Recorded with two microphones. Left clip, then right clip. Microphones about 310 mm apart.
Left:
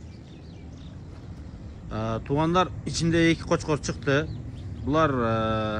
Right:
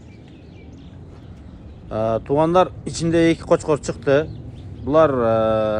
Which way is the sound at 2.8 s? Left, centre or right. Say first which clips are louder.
Right 5 dB; centre.